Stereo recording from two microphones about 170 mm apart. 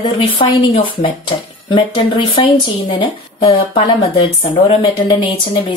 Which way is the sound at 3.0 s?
30° left (ahead or behind).